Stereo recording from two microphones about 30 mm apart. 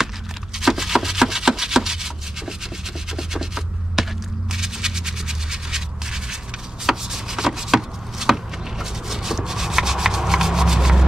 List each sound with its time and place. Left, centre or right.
0.6 s rub: centre
3.2 s a sound: centre
6.9 s rub: centre